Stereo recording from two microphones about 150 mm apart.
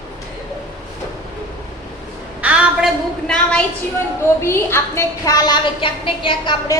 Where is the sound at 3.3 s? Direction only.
5° left (ahead or behind).